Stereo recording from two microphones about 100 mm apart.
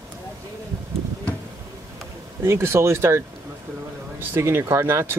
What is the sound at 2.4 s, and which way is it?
Speech, 25° right (ahead or behind).